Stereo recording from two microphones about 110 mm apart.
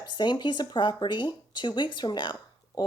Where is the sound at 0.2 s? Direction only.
45° left (ahead or behind).